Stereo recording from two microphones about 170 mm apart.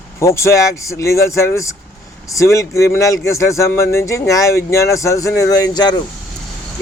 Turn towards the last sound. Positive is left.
turn(degrees=25)  # may be behind; listen again after turning